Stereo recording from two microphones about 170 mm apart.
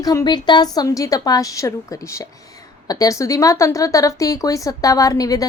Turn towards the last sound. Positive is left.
turn(degrees=20)  # may be behind; listen again after turning